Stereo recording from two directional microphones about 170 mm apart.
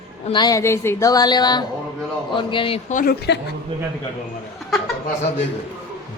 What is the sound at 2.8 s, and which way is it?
Speech, 55° left (ahead or behind).